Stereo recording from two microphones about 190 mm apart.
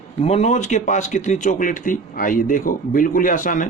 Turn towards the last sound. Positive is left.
turn(degrees=45)  # may be behind; listen again after turning